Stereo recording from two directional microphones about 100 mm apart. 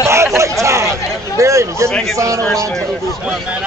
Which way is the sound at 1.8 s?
10° left (ahead or behind).